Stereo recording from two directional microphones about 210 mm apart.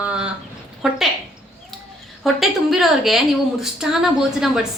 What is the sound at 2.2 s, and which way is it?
A woman's voice, centre (ahead or behind).